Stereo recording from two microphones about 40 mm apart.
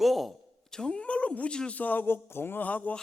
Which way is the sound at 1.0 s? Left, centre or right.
Left.